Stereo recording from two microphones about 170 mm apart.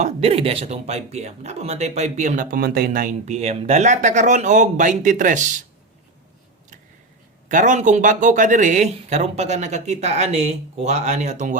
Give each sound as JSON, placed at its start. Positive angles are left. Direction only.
{"t": 0.0, "sound": "speech", "side_deg": -35}
{"t": 7.4, "sound": "speech", "side_deg": -45}